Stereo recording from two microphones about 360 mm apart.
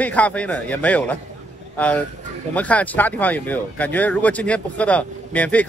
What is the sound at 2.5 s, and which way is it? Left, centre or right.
Speech, centre.